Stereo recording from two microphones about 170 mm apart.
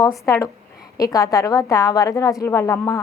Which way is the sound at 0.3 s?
15° left (ahead or behind).